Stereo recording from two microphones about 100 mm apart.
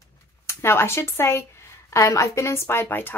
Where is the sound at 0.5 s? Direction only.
25° left (ahead or behind).